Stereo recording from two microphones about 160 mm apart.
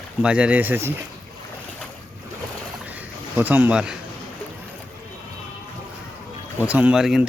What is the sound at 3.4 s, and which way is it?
Speech, 10° right (ahead or behind).